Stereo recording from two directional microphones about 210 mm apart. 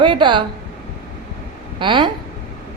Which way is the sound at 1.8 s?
25° right (ahead or behind).